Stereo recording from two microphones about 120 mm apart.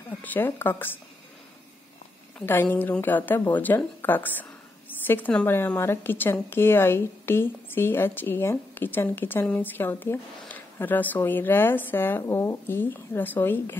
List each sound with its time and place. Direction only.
0.2 s a woman's voice: 15° left (ahead or behind)
2.3 s a woman's voice: 15° left (ahead or behind)